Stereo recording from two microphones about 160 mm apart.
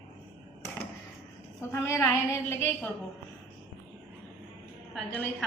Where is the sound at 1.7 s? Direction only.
15° left (ahead or behind).